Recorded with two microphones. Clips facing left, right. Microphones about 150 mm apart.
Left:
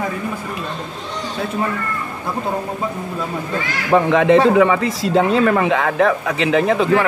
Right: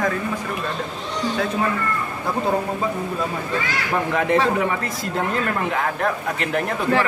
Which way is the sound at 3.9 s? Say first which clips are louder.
Left 8 dB; 85° left.